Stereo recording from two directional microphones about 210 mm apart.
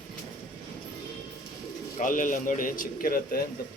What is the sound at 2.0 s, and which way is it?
A man's voice, 40° left (ahead or behind).